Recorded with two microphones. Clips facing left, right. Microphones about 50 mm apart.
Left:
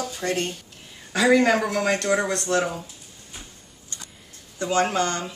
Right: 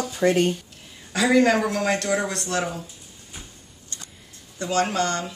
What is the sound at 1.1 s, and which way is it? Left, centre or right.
Speech, centre.